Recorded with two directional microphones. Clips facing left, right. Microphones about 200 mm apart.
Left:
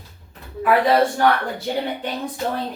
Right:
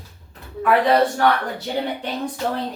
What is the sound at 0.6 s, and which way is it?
Speech, 5° left (ahead or behind).